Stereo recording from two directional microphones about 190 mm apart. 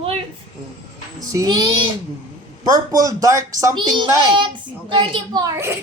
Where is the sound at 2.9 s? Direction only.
20° right (ahead or behind).